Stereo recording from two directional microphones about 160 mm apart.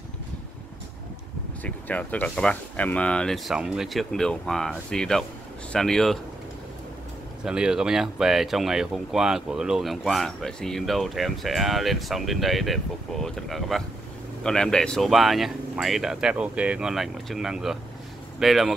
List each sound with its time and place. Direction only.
1.6 s speech: 10° left (ahead or behind)
7.4 s speech: 5° right (ahead or behind)